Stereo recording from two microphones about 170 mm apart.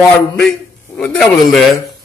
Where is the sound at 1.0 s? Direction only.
5° left (ahead or behind).